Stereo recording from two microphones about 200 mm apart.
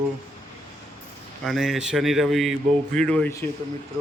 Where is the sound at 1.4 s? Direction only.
Centre (ahead or behind).